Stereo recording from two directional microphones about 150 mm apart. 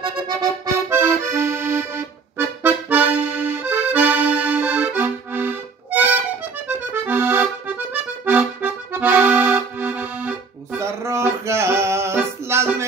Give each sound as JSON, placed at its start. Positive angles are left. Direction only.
{"t": 0.0, "sound": "accordion", "side_deg": -25}